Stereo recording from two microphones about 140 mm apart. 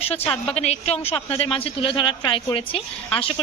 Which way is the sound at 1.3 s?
45° left (ahead or behind).